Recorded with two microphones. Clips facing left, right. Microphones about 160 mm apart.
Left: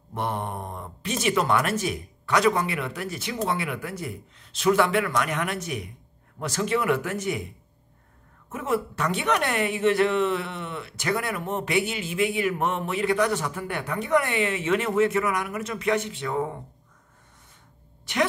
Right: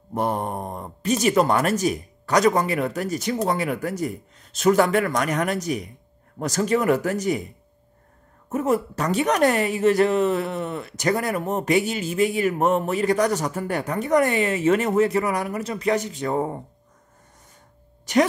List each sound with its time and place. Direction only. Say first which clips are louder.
0.1 s a woman's voice: right 5 dB; 40° right (ahead or behind)
8.5 s a woman's voice: right 5 dB; 40° right (ahead or behind)
18.1 s a woman's voice: right 7 dB; 40° right (ahead or behind)